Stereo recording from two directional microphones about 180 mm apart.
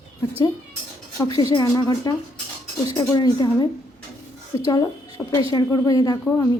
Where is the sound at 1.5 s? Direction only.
20° left (ahead or behind).